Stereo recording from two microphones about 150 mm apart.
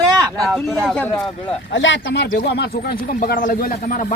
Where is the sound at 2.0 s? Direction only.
80° left.